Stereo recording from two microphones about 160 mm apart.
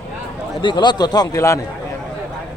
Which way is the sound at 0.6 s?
30° left (ahead or behind).